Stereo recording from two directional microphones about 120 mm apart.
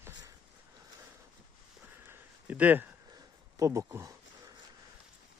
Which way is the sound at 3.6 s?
25° right (ahead or behind).